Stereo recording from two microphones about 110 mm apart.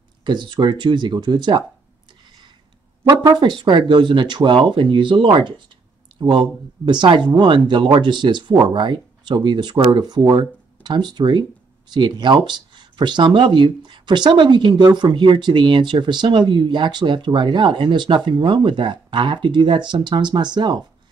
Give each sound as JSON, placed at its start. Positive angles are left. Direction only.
{"t": 0.2, "sound": "speech", "side_deg": -45}
{"t": 3.1, "sound": "speech", "side_deg": -45}